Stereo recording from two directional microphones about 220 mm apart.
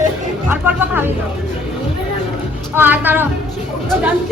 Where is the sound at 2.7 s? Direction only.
10° right (ahead or behind).